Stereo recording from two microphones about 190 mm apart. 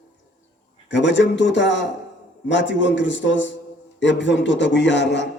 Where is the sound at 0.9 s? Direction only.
70° left (ahead or behind).